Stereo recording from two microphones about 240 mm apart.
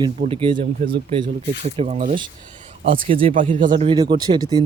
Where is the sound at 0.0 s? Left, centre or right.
Right.